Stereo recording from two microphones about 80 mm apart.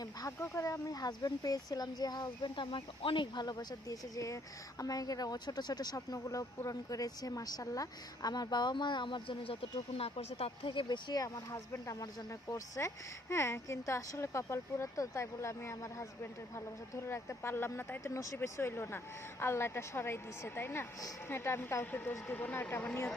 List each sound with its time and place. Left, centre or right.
0.0 s speech: left
0.4 s speech: left
2.6 s speech: left
3.4 s speech: left
6.1 s speech: left
6.7 s speech: left
11.5 s a woman's voice: left